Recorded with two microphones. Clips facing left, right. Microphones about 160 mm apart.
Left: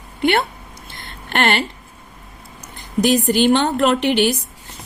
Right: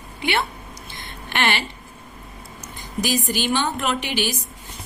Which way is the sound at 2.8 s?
60° left (ahead or behind).